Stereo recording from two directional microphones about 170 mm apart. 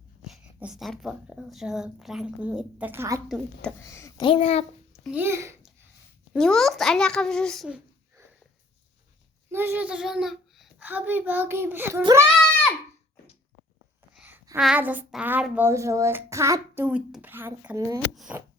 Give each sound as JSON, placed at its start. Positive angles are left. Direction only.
{"t": 0.3, "sound": "speech", "side_deg": 0}
{"t": 3.2, "sound": "speech", "side_deg": 0}
{"t": 3.8, "sound": "speech", "side_deg": 15}
{"t": 4.3, "sound": "a child's voice", "side_deg": 35}
{"t": 5.1, "sound": "a child's voice", "side_deg": -15}
{"t": 6.3, "sound": "speech", "side_deg": 5}
{"t": 9.5, "sound": "a child's voice", "side_deg": -15}
{"t": 14.2, "sound": "a sound", "side_deg": -10}
{"t": 14.5, "sound": "a child's voice", "side_deg": -5}
{"t": 18.1, "sound": "speech", "side_deg": 0}